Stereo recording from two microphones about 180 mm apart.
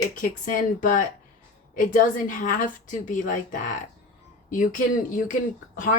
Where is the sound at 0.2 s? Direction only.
50° left (ahead or behind).